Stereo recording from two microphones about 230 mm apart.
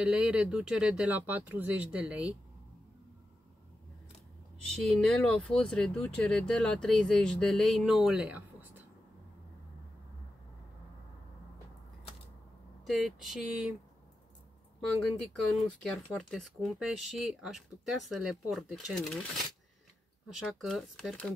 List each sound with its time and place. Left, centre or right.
0.0 s speech: centre
4.7 s speech: centre
12.8 s speech: centre
15.6 s speech: centre
20.3 s speech: centre